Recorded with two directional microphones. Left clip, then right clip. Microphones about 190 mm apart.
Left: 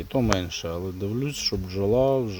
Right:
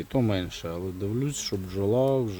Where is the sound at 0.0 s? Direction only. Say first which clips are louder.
Left 3 dB; 10° right (ahead or behind).